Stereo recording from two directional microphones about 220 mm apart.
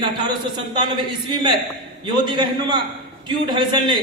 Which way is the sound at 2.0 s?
20° right (ahead or behind).